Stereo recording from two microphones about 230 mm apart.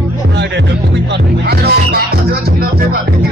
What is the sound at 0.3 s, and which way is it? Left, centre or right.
Music, right.